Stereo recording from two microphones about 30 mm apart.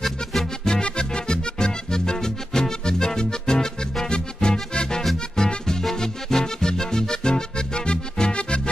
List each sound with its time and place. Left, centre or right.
0.0 s music: centre
0.7 s music: left